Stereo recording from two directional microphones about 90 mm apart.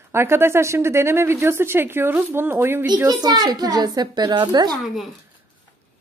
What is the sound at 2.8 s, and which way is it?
A woman's voice, 50° right (ahead or behind).